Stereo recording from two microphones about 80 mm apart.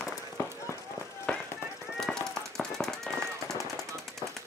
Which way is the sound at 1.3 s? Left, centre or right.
Centre.